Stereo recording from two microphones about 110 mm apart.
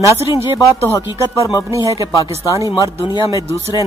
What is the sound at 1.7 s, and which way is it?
Speech, 30° right (ahead or behind).